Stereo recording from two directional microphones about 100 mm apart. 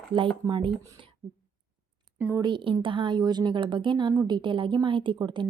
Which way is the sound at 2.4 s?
55° right (ahead or behind).